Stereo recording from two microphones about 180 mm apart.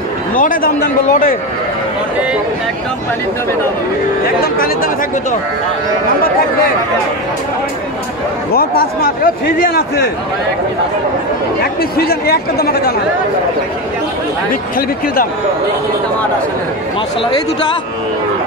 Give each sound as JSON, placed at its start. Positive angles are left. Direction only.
{"t": 0.4, "sound": "a man's voice", "side_deg": 50}
{"t": 4.2, "sound": "a man's voice", "side_deg": 55}
{"t": 8.5, "sound": "a man's voice", "side_deg": 55}
{"t": 12.0, "sound": "a man's voice", "side_deg": 60}
{"t": 14.5, "sound": "a man's voice", "side_deg": 50}